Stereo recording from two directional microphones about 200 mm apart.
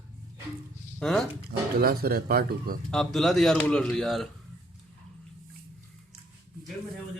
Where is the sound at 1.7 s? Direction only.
50° right (ahead or behind).